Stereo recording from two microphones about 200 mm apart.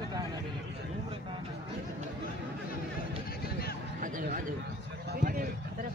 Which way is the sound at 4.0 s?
45° right (ahead or behind).